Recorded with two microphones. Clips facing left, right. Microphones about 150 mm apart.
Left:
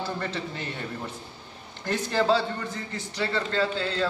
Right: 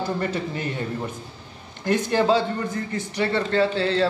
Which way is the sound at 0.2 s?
10° right (ahead or behind).